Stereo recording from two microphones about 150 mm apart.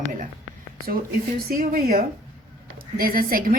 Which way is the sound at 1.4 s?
75° right (ahead or behind).